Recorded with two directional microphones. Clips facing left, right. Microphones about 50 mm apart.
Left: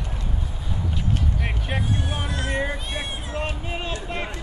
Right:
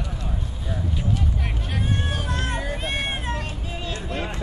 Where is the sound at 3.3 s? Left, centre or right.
Left.